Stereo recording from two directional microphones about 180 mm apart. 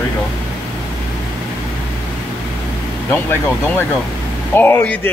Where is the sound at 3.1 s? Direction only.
10° left (ahead or behind).